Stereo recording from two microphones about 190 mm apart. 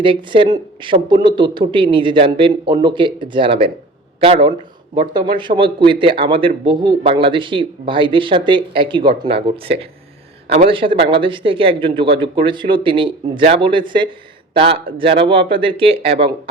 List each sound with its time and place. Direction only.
0.0 s a man's voice: 25° right (ahead or behind)